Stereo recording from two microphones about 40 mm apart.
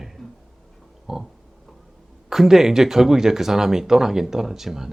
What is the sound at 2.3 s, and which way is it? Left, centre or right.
Speech, centre.